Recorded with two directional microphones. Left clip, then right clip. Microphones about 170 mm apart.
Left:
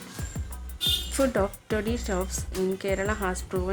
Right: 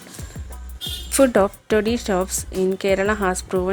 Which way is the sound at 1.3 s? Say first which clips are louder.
Right 9 dB; 45° right (ahead or behind).